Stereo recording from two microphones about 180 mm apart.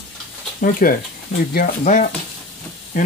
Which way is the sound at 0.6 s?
50° left (ahead or behind).